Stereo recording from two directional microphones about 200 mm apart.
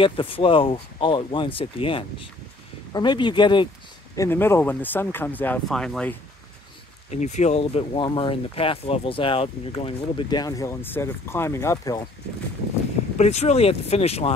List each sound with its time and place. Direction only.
0.0 s speech: 25° left (ahead or behind); by 6.1 s 5° left (ahead or behind)
7.1 s speech: 35° left (ahead or behind); by 12.0 s 15° left (ahead or behind)
13.2 s speech: 35° left (ahead or behind)